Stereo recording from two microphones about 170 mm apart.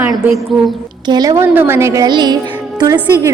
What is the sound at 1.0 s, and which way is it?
A woman's voice, 25° right (ahead or behind).